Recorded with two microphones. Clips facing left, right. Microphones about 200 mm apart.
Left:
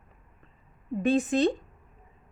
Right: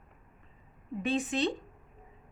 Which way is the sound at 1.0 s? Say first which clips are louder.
Left 7 dB; 45° left (ahead or behind).